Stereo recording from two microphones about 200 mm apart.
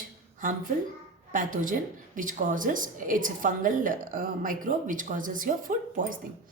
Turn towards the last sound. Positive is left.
turn(degrees=-40)  # may be behind; listen again after turning